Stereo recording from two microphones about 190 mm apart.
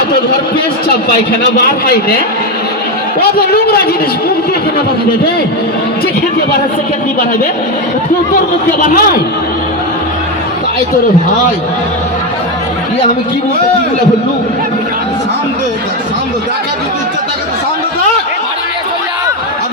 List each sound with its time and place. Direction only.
1.6 s a man's voice: 55° left (ahead or behind)
3.2 s a man's voice: 55° left (ahead or behind)
8.8 s speech: 50° left (ahead or behind)